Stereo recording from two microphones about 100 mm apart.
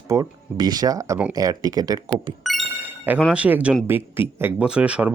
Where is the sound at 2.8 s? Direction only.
15° right (ahead or behind).